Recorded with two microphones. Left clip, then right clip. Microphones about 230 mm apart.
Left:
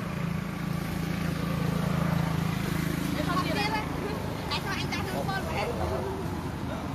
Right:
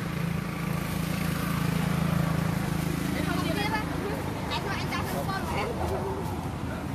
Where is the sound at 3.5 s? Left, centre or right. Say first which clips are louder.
Even; left.